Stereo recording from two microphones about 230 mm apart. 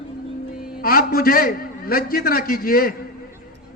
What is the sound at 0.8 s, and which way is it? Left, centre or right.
A man's voice, left.